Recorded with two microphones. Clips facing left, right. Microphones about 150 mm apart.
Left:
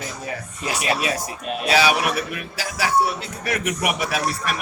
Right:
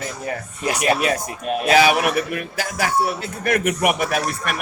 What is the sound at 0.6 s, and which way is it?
A man's voice, 50° right (ahead or behind).